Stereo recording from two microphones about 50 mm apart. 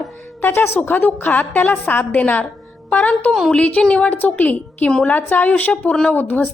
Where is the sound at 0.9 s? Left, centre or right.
Left.